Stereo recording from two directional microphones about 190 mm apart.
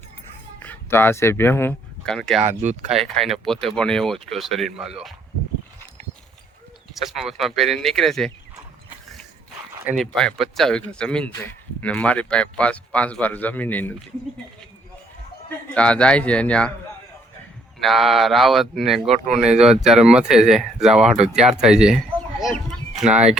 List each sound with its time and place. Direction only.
0.6 s speech: 10° left (ahead or behind)
2.6 s speech: 40° right (ahead or behind)
2.9 s speech: centre (ahead or behind)
6.9 s speech: centre (ahead or behind)
9.8 s speech: centre (ahead or behind)
15.4 s speech: 5° left (ahead or behind)
17.8 s speech: centre (ahead or behind)
19.1 s speech: 40° right (ahead or behind)
19.8 s speech: centre (ahead or behind)